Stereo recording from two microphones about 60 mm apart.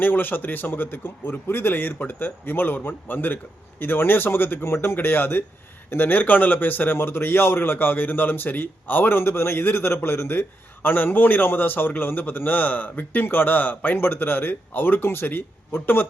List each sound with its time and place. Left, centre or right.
0.0 s a man's voice: left